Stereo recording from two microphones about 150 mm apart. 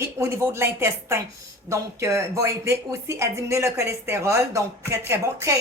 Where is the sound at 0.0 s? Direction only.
20° right (ahead or behind).